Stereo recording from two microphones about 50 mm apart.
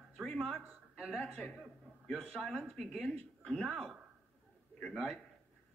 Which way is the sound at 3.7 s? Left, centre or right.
Centre.